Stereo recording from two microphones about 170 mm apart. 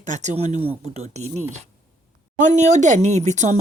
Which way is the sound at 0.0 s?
45° right (ahead or behind).